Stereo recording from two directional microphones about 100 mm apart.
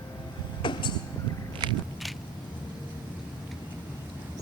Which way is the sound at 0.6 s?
55° left (ahead or behind).